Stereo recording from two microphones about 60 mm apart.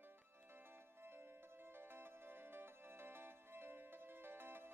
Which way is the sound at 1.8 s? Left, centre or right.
Right.